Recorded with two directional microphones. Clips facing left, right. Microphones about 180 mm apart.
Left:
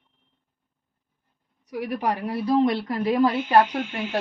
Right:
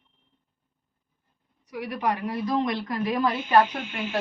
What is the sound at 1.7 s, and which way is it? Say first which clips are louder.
A woman's voice: left 2 dB; 35° left (ahead or behind).